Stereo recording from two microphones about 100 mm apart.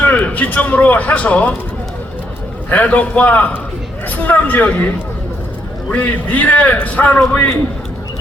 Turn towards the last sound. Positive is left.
turn(degrees=15)  # may be behind; listen again after turning